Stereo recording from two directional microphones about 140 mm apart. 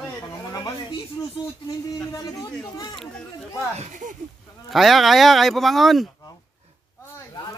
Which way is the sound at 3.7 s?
55° right (ahead or behind).